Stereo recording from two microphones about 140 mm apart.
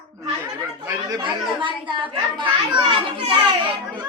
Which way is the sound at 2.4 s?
35° right (ahead or behind).